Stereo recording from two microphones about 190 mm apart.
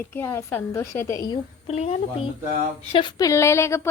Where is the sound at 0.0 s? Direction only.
15° left (ahead or behind).